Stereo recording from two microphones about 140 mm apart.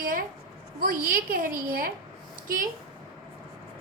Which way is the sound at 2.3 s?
80° right.